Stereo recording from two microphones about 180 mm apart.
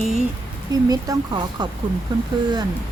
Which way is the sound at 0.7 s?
20° right (ahead or behind).